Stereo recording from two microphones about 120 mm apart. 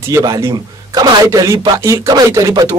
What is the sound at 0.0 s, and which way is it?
A man's voice, 25° right (ahead or behind).